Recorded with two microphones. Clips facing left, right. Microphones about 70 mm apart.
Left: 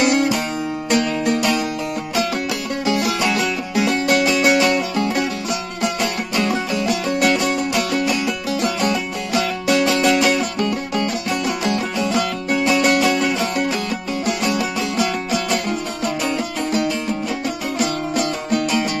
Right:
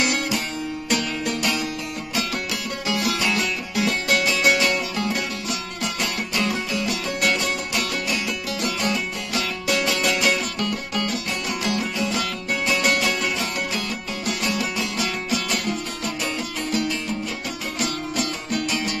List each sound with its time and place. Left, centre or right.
0.0 s music: left
2.8 s music: left
17.7 s music: left